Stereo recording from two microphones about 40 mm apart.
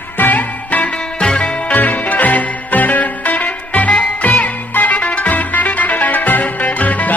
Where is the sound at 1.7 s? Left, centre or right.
Left.